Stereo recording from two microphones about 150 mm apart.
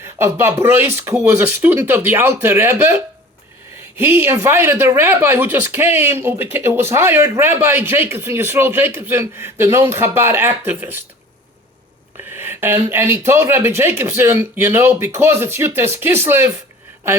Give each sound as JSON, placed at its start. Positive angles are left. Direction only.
{"t": 0.0, "sound": "speech", "side_deg": -15}
{"t": 12.3, "sound": "speech", "side_deg": -15}